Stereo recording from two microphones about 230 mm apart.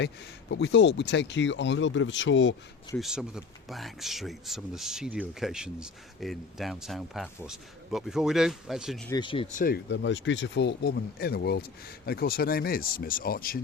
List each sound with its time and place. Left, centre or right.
0.5 s speech: left
3.0 s a man's voice: centre
9.0 s speech: centre
9.6 s speech: left